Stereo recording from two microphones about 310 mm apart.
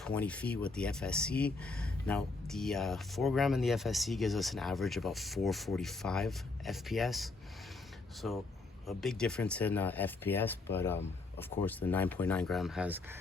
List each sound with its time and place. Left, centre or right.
0.0 s speech: centre